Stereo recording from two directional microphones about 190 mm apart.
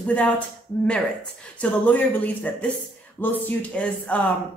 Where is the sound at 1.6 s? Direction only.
10° left (ahead or behind).